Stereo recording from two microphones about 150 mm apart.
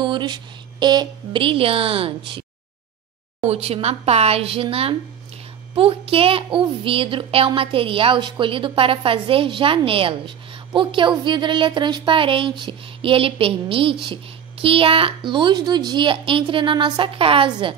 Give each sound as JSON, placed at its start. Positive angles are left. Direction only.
{"t": 0.0, "sound": "a woman's voice", "side_deg": -30}
{"t": 3.4, "sound": "a woman's voice", "side_deg": -40}